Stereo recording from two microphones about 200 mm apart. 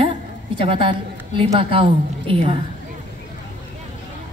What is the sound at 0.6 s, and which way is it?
A woman's voice, 25° right (ahead or behind).